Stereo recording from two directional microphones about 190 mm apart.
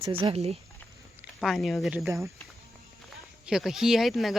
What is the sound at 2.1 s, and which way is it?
Speech, 15° right (ahead or behind).